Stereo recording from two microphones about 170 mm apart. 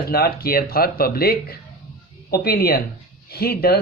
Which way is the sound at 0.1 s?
65° left (ahead or behind).